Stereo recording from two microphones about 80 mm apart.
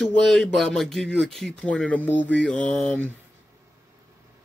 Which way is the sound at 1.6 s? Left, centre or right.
Centre.